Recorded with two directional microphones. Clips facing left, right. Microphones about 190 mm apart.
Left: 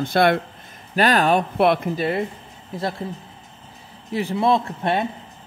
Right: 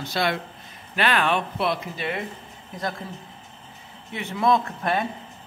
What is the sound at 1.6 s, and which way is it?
Speech, 55° left (ahead or behind).